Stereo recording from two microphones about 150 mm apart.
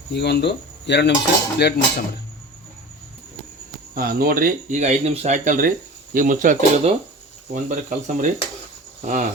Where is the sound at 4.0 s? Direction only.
80° right; by 6.5 s 60° right (ahead or behind).